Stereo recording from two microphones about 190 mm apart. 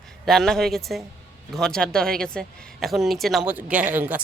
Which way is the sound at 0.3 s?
Centre (ahead or behind).